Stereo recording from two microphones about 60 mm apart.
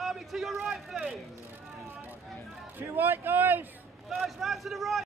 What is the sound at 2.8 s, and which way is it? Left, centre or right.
Speech, right.